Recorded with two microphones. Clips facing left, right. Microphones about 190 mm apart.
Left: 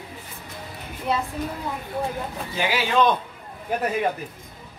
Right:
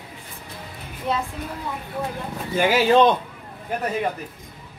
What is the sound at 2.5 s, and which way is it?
Speech, 45° right (ahead or behind).